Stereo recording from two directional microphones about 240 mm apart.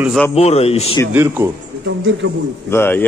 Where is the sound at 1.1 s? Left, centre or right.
Centre.